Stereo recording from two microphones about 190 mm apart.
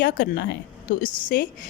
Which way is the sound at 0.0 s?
55° left (ahead or behind).